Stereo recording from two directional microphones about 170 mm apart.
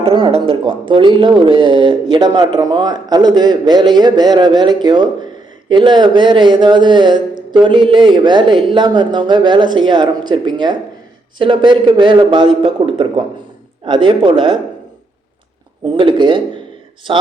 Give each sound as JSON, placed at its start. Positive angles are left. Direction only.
{"t": 0.0, "sound": "speech", "side_deg": -30}
{"t": 16.0, "sound": "speech", "side_deg": -30}